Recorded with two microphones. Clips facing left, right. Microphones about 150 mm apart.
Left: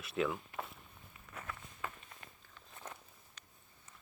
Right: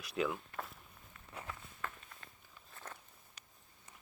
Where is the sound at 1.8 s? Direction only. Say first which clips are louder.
Left 1 dB; 10° left (ahead or behind).